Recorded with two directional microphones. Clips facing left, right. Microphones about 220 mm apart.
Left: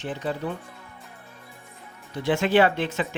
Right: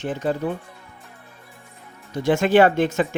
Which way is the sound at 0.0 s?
45° right (ahead or behind).